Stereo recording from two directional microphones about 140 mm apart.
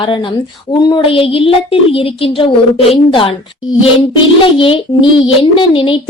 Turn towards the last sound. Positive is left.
turn(degrees=40)  # may be behind; listen again after turning